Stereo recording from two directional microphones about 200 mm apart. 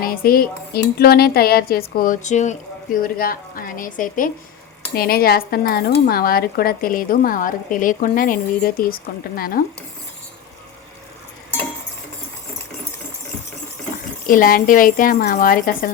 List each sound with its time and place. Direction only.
0.0 s speech: 45° left (ahead or behind)
14.3 s speech: 45° left (ahead or behind)